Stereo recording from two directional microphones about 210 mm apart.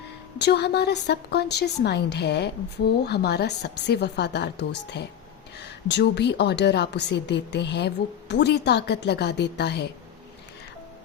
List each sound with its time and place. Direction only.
0.3 s speech: 55° left (ahead or behind)